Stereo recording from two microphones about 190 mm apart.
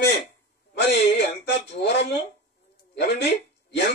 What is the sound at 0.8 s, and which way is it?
Speech, 70° left (ahead or behind).